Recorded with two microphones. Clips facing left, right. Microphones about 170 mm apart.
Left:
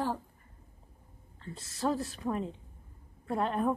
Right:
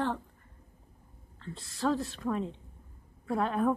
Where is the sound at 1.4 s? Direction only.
Centre (ahead or behind).